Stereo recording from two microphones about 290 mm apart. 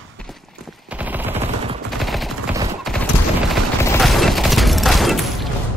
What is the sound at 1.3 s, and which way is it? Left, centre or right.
Gunshot, right.